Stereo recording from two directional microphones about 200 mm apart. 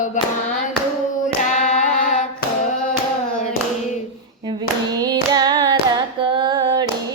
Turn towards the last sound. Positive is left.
turn(degrees=-20)  # may be behind; listen again after turning